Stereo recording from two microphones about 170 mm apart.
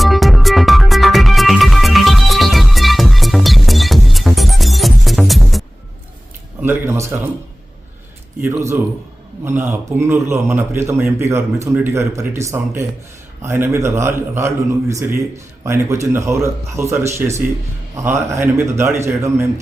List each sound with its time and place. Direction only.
0.0 s music: centre (ahead or behind)
6.6 s a sound: 15° right (ahead or behind)
8.4 s a man's voice: 15° right (ahead or behind)